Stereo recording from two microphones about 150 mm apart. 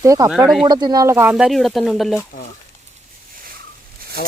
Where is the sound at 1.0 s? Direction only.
15° right (ahead or behind).